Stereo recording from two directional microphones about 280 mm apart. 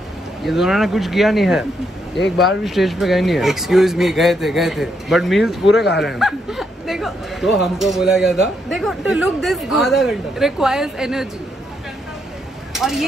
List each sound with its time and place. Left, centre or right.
0.4 s speech: centre
12.7 s speech: centre